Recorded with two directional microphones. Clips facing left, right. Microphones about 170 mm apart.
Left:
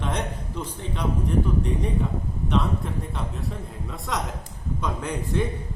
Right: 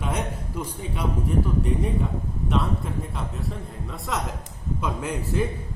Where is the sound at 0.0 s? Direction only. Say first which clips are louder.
Even; 5° right (ahead or behind).